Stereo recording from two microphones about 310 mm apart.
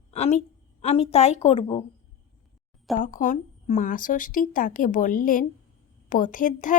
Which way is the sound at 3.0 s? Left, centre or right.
Left.